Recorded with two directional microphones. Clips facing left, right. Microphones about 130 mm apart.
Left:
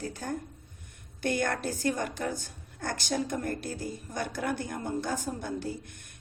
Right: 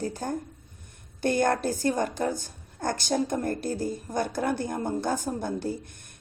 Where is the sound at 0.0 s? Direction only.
35° right (ahead or behind).